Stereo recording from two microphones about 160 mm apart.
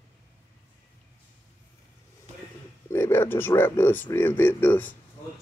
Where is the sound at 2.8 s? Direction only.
15° left (ahead or behind).